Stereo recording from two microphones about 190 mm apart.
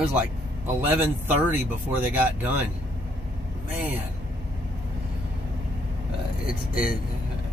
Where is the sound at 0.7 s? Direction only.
10° right (ahead or behind).